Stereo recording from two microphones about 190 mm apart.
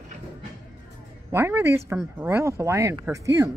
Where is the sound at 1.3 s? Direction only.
15° right (ahead or behind).